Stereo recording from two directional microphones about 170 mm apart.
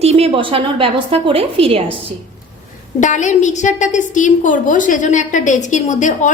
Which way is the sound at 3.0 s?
45° left (ahead or behind).